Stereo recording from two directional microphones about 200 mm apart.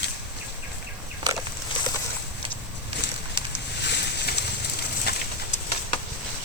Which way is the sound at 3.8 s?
60° left (ahead or behind).